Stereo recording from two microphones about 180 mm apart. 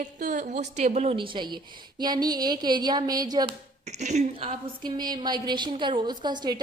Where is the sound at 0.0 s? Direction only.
45° right (ahead or behind); by 3.5 s 20° right (ahead or behind).